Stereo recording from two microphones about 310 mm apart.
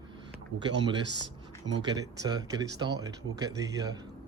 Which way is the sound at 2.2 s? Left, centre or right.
Centre.